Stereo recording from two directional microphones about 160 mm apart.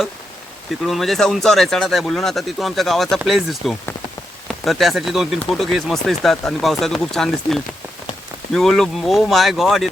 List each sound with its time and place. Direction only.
0.8 s speech: centre (ahead or behind)